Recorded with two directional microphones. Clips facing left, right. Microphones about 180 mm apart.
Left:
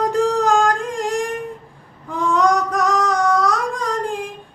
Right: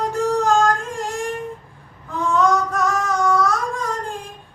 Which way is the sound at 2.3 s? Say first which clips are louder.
Left 1 dB; 15° left (ahead or behind).